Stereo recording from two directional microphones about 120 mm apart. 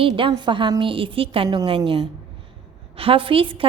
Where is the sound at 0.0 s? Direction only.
45° right (ahead or behind).